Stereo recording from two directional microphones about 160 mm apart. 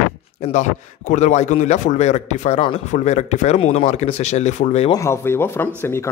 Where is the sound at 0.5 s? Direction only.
50° left (ahead or behind).